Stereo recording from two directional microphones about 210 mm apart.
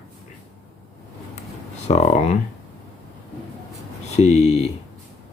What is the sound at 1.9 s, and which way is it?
Speech, 30° left (ahead or behind).